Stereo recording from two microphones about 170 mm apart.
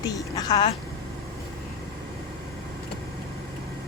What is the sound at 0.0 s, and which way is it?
Speech, 20° left (ahead or behind).